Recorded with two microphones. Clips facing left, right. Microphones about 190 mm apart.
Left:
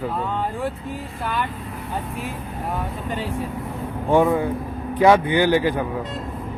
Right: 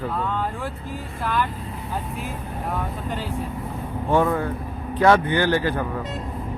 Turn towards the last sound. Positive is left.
turn(degrees=15)  # may be behind; listen again after turning